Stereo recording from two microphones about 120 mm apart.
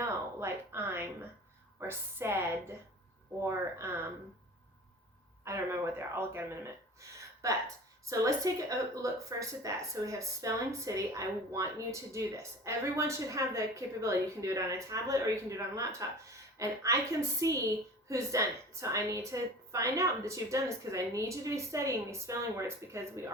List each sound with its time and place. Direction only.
0.0 s speech: 20° right (ahead or behind)
3.8 s speech: 20° right (ahead or behind)
5.5 s speech: 20° right (ahead or behind)